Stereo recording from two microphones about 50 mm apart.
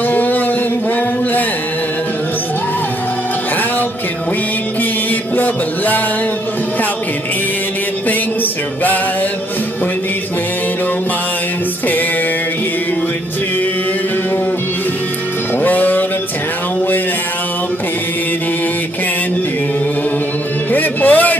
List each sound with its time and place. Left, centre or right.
0.1 s a sound: left
5.3 s music: left
15.6 s music: left
20.7 s music: left